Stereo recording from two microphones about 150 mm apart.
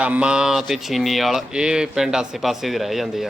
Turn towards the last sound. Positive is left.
turn(degrees=0)  # may be behind; listen again after turning